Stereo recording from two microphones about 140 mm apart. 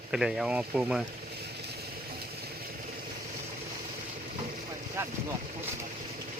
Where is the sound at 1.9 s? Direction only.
90° right.